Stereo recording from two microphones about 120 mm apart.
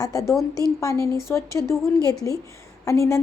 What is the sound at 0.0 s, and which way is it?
A woman's voice, 30° left (ahead or behind).